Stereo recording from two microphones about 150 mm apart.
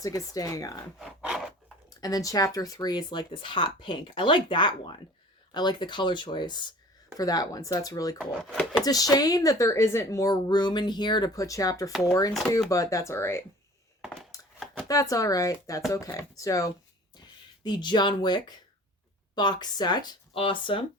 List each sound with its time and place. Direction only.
0.0 s speech: 25° left (ahead or behind)
0.9 s a sound: 5° right (ahead or behind)
2.0 s speech: 25° left (ahead or behind)
8.2 s speech: 5° right (ahead or behind)
8.8 s speech: 25° left (ahead or behind)
11.9 s speech: centre (ahead or behind)
12.7 s speech: 20° left (ahead or behind)
14.0 s a sound: centre (ahead or behind)
14.8 s speech: 25° left (ahead or behind)